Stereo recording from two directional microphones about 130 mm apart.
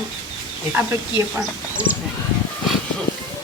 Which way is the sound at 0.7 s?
15° right (ahead or behind).